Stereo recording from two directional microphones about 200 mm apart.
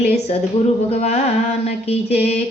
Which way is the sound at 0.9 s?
35° left (ahead or behind).